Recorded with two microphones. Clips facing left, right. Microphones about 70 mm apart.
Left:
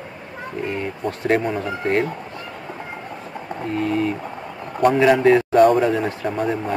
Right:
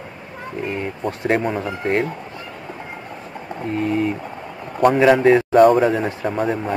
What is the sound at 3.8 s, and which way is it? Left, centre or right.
Speech, centre.